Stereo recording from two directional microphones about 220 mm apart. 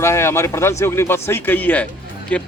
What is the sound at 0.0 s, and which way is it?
A man's voice, 10° left (ahead or behind).